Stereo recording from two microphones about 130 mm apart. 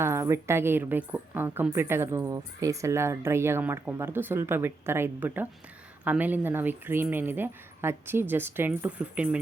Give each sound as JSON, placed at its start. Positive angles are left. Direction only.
{"t": 0.0, "sound": "a woman's voice", "side_deg": -20}